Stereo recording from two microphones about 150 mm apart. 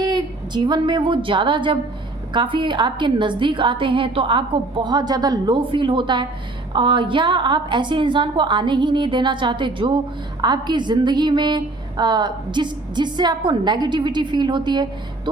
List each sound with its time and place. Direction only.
0.0 s a woman's voice: 25° right (ahead or behind)